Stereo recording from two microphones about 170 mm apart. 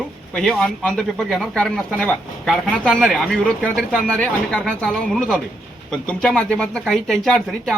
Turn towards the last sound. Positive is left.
turn(degrees=0)  # may be behind; listen again after turning